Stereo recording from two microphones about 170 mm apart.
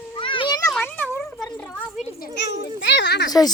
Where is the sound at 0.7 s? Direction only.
10° left (ahead or behind).